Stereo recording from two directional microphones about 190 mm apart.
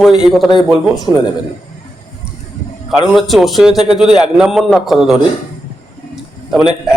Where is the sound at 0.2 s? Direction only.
Centre (ahead or behind).